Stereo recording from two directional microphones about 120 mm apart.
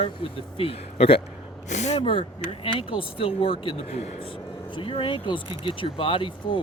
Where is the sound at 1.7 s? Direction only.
75° left (ahead or behind).